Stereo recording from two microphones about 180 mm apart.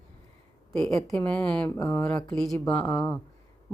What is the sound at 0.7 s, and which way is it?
Speech, 5° left (ahead or behind).